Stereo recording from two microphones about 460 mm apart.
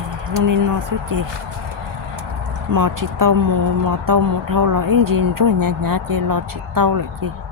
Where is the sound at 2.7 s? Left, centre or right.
Right.